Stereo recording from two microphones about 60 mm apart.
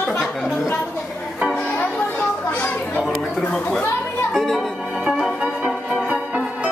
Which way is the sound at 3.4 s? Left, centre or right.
Centre.